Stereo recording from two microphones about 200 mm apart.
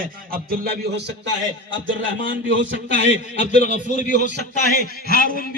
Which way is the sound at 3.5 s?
35° left (ahead or behind).